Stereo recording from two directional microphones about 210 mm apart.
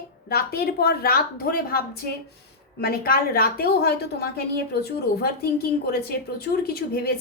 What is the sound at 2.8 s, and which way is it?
A woman's voice, 45° left (ahead or behind).